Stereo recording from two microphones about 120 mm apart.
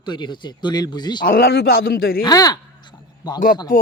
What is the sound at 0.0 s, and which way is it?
Speech, 40° left (ahead or behind).